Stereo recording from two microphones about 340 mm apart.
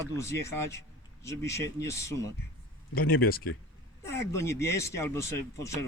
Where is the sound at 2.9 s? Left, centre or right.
Left.